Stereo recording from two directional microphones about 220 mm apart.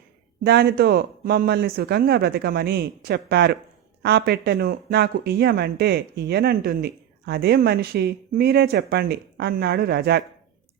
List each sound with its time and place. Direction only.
0.4 s speech: 45° right (ahead or behind)